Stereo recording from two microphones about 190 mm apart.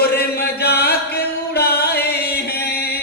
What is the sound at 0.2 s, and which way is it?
Music, 55° left (ahead or behind).